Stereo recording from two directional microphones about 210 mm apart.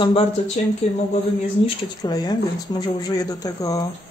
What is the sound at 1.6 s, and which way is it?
Speech, 20° left (ahead or behind).